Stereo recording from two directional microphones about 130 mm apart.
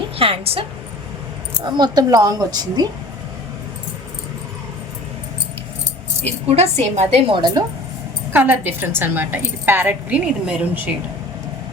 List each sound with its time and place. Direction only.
0.2 s a woman's voice: 45° right (ahead or behind)
1.6 s a woman's voice: 35° right (ahead or behind)
6.2 s a woman's voice: 55° right (ahead or behind)
7.3 s a woman's voice: 35° right (ahead or behind)
8.3 s a woman's voice: 15° right (ahead or behind)